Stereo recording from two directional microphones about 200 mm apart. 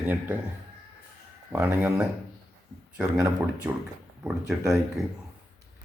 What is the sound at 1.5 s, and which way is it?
Speech, 10° right (ahead or behind).